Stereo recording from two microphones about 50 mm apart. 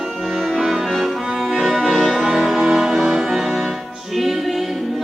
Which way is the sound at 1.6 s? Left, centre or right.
Centre.